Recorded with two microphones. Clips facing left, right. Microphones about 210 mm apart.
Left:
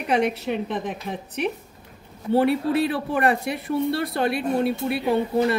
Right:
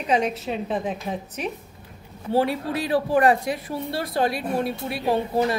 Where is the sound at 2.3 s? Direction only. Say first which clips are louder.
Left 3 dB; 60° left (ahead or behind).